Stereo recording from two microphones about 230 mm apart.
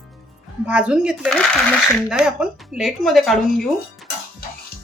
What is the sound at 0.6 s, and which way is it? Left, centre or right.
Speech, centre.